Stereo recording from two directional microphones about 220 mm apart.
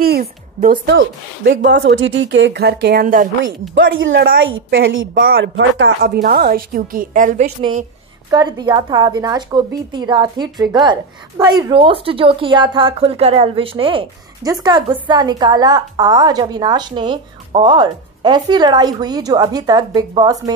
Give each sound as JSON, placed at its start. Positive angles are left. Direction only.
{"t": 0.0, "sound": "a woman's voice", "side_deg": -45}
{"t": 3.7, "sound": "a woman's voice", "side_deg": -60}
{"t": 8.3, "sound": "a woman's voice", "side_deg": -20}